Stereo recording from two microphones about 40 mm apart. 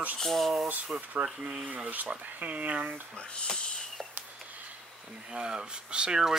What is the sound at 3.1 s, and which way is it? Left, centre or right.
Speech, left.